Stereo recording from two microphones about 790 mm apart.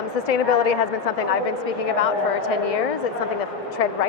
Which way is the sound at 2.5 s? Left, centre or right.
Left.